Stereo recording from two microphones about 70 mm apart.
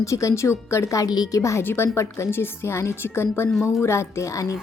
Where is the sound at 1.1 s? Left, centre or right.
Left.